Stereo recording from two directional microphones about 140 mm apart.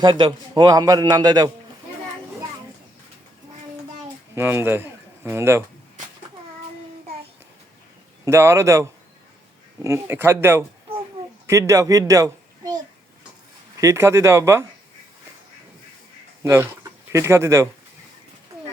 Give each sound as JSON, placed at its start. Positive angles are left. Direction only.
{"t": 0.0, "sound": "a man's voice", "side_deg": -35}
{"t": 4.4, "sound": "a man's voice", "side_deg": -15}
{"t": 8.2, "sound": "a man's voice", "side_deg": -20}
{"t": 16.4, "sound": "a man's voice", "side_deg": -20}